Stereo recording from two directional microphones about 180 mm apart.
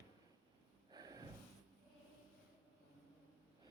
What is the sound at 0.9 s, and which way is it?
Snort, 20° right (ahead or behind).